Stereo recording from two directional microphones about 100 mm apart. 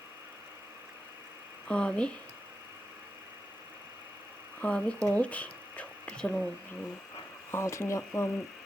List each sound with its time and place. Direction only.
1.6 s speech: 10° left (ahead or behind)
4.6 s speech: 10° left (ahead or behind)
7.5 s speech: 30° left (ahead or behind)